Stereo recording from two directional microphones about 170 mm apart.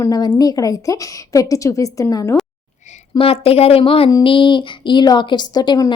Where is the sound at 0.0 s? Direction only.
20° left (ahead or behind).